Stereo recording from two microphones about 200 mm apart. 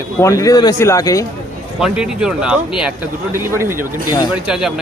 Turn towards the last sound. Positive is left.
turn(degrees=-5)  # may be behind; listen again after turning